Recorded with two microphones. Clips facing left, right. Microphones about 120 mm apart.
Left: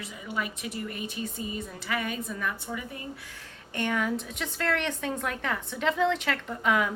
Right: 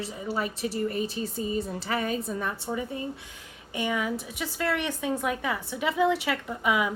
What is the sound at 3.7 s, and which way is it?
A woman's voice, 5° right (ahead or behind).